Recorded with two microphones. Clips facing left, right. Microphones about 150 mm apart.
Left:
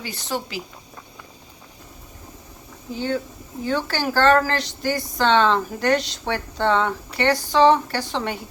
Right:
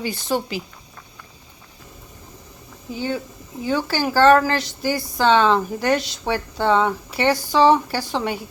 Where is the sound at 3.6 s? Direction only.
10° right (ahead or behind).